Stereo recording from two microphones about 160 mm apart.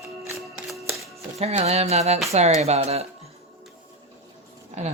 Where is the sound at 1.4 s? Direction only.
40° right (ahead or behind).